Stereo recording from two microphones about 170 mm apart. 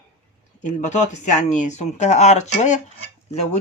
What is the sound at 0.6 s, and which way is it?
Speech, 45° left (ahead or behind).